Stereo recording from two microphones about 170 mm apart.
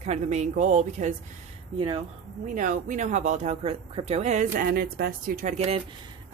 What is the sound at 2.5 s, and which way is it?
Speech, 50° right (ahead or behind).